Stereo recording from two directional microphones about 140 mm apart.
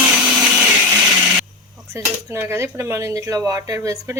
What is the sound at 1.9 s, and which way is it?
Speech, 20° right (ahead or behind).